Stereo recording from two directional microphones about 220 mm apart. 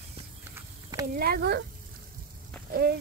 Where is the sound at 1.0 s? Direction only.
40° right (ahead or behind).